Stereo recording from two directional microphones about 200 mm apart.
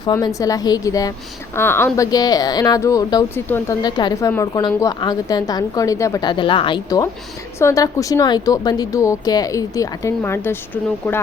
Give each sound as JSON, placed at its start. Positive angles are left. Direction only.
{"t": 0.0, "sound": "a woman's voice", "side_deg": 20}